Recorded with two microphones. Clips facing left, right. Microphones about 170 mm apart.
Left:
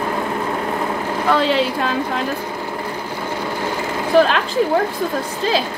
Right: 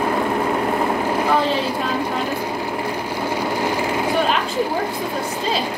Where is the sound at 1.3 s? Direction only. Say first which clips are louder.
Left 5 dB; 85° left.